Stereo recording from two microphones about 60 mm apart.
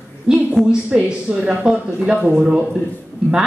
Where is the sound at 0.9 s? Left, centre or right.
Centre.